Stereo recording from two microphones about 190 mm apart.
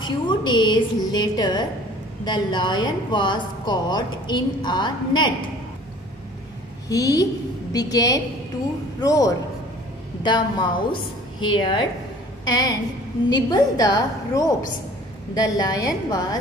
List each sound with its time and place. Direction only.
0.0 s a woman's voice: 25° left (ahead or behind)
6.9 s a woman's voice: 20° left (ahead or behind)